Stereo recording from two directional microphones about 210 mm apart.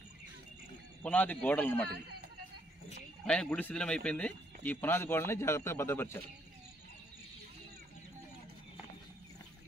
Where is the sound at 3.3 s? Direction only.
5° left (ahead or behind).